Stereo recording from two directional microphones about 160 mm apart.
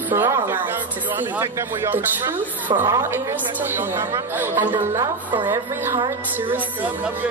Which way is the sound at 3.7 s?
10° right (ahead or behind).